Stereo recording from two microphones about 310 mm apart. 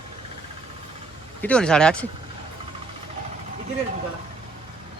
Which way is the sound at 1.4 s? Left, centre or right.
Centre.